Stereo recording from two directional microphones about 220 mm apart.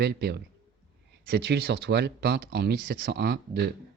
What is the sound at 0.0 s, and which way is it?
Speech, 45° right (ahead or behind).